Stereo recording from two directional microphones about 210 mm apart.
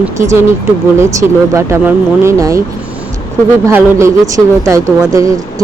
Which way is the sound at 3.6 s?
15° right (ahead or behind).